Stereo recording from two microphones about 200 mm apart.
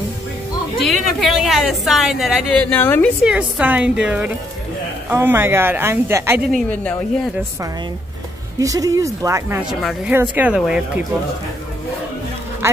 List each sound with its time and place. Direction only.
0.7 s a woman's voice: centre (ahead or behind)
3.3 s speech: 5° right (ahead or behind)
6.5 s speech: 5° left (ahead or behind)
8.5 s a woman's voice: 15° right (ahead or behind)